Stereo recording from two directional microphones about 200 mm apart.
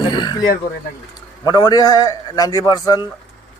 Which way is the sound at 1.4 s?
20° left (ahead or behind).